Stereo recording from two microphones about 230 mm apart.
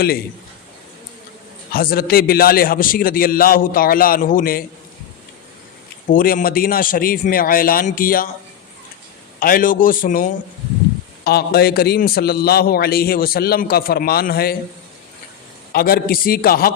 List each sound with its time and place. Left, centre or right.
1.7 s a man's voice: left
6.1 s a man's voice: left
9.4 s a man's voice: left
15.7 s a man's voice: left